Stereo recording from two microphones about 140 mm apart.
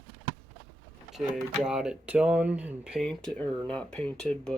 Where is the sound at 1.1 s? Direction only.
Centre (ahead or behind).